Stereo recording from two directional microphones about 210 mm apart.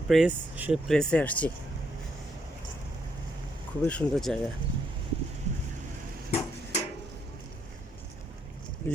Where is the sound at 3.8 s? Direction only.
5° left (ahead or behind).